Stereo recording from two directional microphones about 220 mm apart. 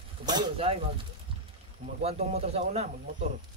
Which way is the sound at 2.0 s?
30° right (ahead or behind).